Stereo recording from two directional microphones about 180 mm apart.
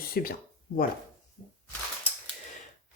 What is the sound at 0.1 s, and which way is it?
Speech, 60° left (ahead or behind).